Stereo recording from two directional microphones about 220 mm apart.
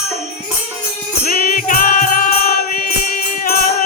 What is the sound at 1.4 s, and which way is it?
Music, 40° left (ahead or behind).